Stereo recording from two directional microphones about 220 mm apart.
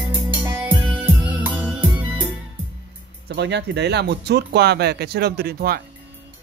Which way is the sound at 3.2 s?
50° right (ahead or behind).